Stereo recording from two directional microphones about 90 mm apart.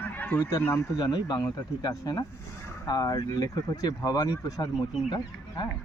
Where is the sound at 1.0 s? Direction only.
50° left (ahead or behind).